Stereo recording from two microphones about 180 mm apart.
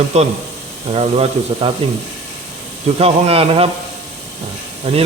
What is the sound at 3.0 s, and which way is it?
Speech, 35° right (ahead or behind).